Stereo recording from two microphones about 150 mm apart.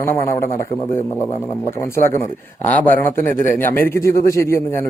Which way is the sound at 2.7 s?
10° left (ahead or behind).